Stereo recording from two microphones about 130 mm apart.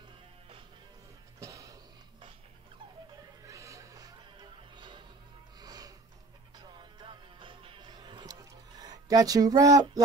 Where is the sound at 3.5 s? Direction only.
25° right (ahead or behind).